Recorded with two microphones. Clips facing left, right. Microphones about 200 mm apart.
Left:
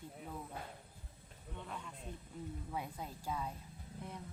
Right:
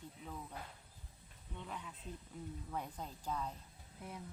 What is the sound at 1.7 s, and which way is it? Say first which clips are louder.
Speech: even; 5° right (ahead or behind).